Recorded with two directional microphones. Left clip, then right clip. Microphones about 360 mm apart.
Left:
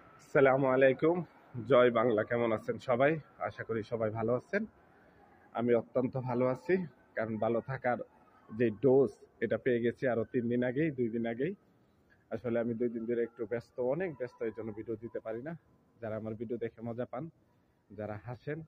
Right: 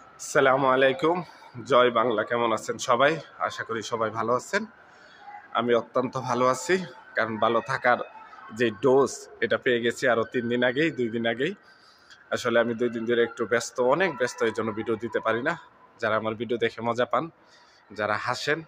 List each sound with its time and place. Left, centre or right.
0.3 s speech: left